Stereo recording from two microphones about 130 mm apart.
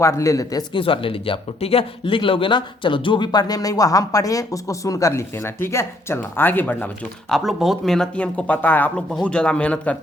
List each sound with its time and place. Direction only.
0.0 s speech: 25° left (ahead or behind)
0.7 s speech: 45° left (ahead or behind); by 6.8 s 15° left (ahead or behind)
7.3 s speech: centre (ahead or behind)